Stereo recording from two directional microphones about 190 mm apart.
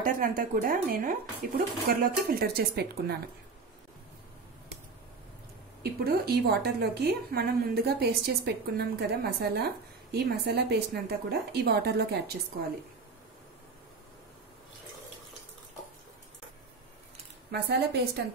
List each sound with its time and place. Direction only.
0.0 s speech: 45° right (ahead or behind)
5.8 s a woman's voice: 55° right (ahead or behind)
17.5 s a woman's voice: 60° right (ahead or behind)